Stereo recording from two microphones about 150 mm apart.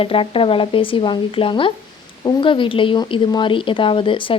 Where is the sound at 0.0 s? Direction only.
35° left (ahead or behind).